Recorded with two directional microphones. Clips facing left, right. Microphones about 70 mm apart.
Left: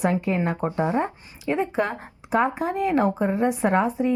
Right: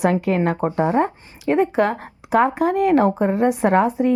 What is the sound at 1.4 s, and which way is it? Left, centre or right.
A woman's voice, right.